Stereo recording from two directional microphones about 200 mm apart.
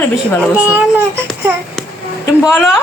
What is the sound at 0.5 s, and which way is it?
Speech, 5° right (ahead or behind).